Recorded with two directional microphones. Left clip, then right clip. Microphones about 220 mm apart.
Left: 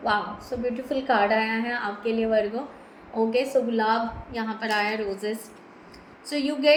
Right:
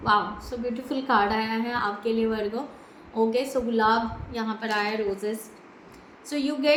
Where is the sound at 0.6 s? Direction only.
15° right (ahead or behind).